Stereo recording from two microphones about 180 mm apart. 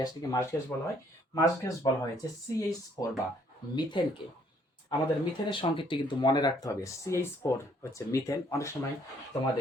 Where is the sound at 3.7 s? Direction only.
25° left (ahead or behind).